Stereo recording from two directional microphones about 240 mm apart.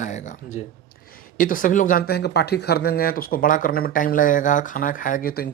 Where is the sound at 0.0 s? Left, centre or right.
Left.